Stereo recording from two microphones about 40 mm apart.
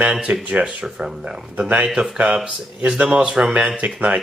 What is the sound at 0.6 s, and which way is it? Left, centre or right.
Speech, centre.